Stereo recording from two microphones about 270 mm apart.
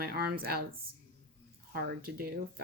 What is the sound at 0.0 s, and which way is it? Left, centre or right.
Speech, right.